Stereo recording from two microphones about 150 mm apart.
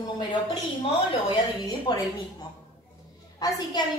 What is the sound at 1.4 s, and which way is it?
Speech, 25° left (ahead or behind).